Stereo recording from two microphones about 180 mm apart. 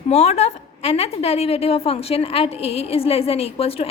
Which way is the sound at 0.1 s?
35° left (ahead or behind).